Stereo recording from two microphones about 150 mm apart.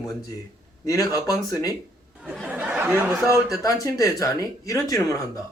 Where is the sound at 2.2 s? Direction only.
5° right (ahead or behind).